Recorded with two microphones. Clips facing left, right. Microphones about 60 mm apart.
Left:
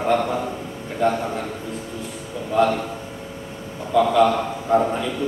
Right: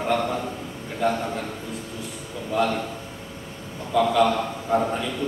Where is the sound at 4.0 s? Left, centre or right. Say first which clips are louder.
Left 3 dB; centre.